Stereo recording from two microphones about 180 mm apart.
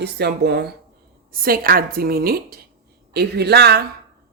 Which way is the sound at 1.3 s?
55° right (ahead or behind).